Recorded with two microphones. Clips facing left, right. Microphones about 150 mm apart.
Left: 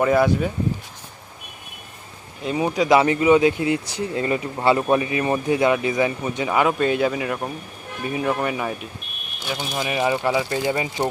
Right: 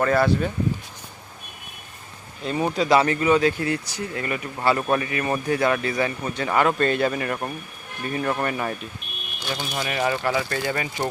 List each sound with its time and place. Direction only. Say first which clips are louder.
0.0 s speech: left 2 dB; 15° left (ahead or behind)
2.4 s speech: left 2 dB; 10° left (ahead or behind)